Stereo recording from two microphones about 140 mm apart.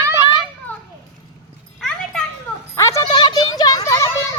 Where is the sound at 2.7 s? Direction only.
20° left (ahead or behind).